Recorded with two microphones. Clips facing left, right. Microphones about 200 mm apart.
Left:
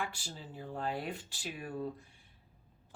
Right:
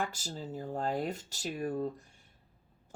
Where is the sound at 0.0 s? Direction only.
40° right (ahead or behind).